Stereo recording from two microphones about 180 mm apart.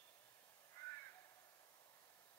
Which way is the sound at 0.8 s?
15° left (ahead or behind).